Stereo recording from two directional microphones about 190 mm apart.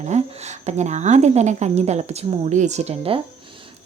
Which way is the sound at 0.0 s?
35° right (ahead or behind).